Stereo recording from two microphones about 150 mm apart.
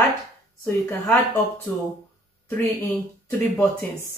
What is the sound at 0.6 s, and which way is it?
Speech, 15° left (ahead or behind).